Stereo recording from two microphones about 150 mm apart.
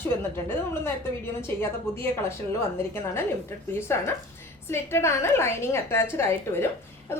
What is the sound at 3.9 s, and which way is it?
A woman's voice, 15° left (ahead or behind).